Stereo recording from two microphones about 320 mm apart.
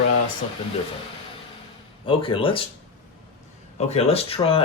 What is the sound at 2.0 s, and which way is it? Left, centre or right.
Speech, centre.